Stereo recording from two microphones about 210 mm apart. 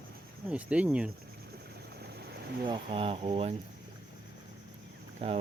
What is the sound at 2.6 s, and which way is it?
Speech, 25° right (ahead or behind).